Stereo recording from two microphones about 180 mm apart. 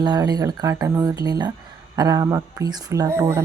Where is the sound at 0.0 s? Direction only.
20° right (ahead or behind).